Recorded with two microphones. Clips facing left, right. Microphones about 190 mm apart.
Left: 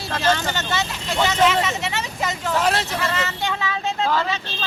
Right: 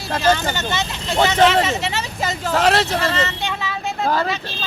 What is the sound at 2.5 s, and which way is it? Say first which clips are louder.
Speech: right 5 dB; 90° right.